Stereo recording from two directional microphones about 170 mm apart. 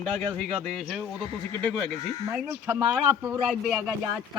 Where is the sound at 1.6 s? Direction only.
10° left (ahead or behind).